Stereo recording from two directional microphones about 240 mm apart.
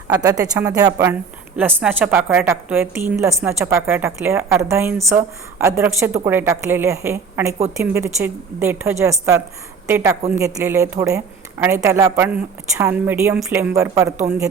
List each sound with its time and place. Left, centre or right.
0.1 s a woman's voice: centre